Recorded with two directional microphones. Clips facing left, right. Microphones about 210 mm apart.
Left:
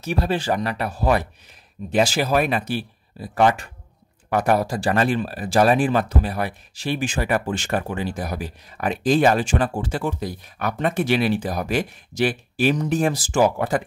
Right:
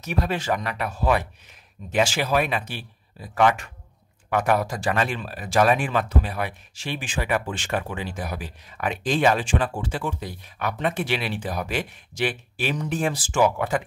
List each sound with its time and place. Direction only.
0.0 s speech: 30° left (ahead or behind)